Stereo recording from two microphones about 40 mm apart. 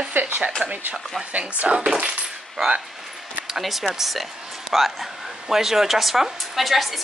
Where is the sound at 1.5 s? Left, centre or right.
Right.